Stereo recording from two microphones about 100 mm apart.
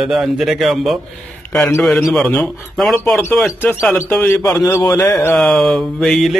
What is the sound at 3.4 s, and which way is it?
A man's voice, 25° left (ahead or behind).